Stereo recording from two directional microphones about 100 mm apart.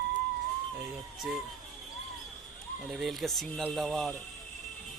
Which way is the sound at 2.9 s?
Centre (ahead or behind).